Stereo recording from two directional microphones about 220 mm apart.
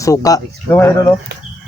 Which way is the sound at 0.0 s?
15° left (ahead or behind).